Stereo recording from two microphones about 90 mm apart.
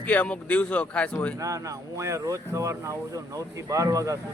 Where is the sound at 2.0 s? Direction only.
35° right (ahead or behind).